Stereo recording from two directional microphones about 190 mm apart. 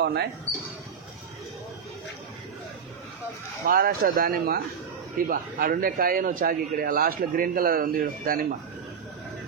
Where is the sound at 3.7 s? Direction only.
50° right (ahead or behind).